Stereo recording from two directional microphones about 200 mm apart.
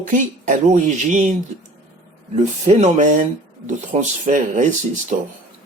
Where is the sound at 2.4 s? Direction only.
35° right (ahead or behind).